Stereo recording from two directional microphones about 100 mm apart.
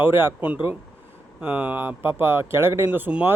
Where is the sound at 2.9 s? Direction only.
15° right (ahead or behind).